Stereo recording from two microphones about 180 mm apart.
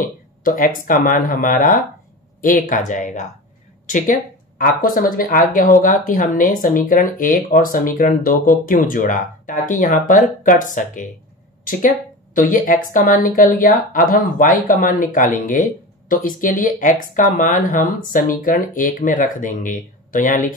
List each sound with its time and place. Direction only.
0.0 s speech: 50° left (ahead or behind)
12.4 s speech: 50° left (ahead or behind)